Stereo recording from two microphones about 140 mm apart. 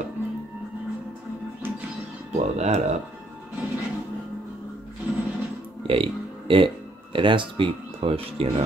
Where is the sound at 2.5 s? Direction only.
55° right (ahead or behind).